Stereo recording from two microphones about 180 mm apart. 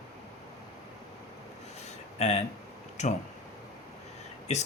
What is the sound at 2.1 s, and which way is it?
Speech, 35° left (ahead or behind).